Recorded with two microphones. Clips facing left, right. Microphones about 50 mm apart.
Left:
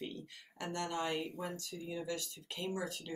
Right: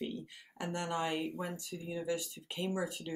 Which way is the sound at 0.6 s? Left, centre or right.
Centre.